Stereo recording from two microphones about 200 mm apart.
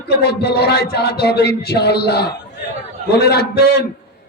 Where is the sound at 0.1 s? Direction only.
55° left (ahead or behind).